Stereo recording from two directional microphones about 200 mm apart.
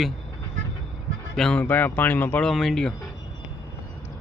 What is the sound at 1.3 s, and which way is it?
Speech, 5° left (ahead or behind).